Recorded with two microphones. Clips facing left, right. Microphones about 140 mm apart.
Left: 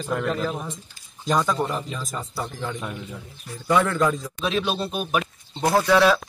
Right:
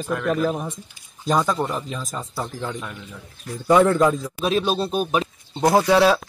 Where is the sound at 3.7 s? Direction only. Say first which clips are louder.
Right 5 dB; 30° right (ahead or behind).